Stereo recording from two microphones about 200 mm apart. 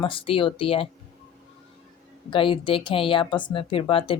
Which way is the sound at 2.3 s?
25° left (ahead or behind).